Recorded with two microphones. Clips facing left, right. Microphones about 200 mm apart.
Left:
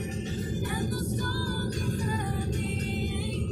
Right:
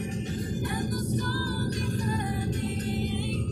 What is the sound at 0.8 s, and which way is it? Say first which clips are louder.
Music: right 2 dB; 10° left (ahead or behind).